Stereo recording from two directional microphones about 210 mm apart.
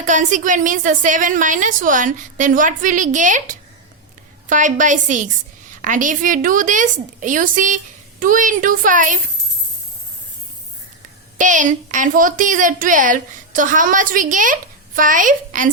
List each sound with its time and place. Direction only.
0.0 s a woman's voice: 35° right (ahead or behind)
11.3 s a woman's voice: 35° right (ahead or behind)